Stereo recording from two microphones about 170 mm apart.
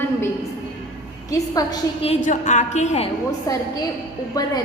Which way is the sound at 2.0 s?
40° left (ahead or behind).